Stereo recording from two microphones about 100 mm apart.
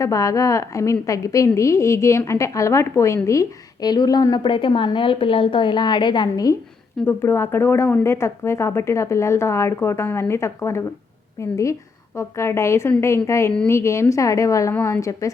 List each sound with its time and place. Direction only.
0.0 s a woman's voice: 35° left (ahead or behind)
4.5 s a woman's voice: 55° left (ahead or behind); by 6.6 s 40° left (ahead or behind)
7.0 s a woman's voice: 25° left (ahead or behind)
14.7 s speech: 20° left (ahead or behind)